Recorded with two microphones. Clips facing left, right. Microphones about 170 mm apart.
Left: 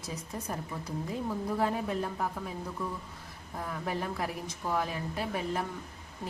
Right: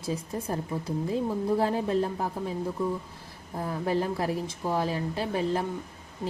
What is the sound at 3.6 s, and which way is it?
A woman's voice, 30° right (ahead or behind).